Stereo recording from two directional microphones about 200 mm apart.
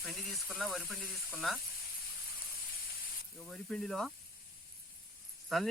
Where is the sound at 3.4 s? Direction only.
5° left (ahead or behind).